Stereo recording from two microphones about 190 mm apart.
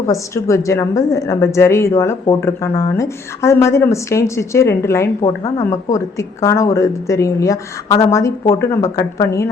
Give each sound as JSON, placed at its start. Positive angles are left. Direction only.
{"t": 0.0, "sound": "a woman's voice", "side_deg": 15}
{"t": 5.2, "sound": "a woman's voice", "side_deg": 25}